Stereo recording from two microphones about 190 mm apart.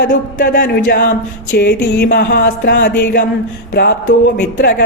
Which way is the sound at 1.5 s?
55° left (ahead or behind).